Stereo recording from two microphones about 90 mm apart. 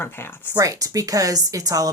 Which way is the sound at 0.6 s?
40° right (ahead or behind).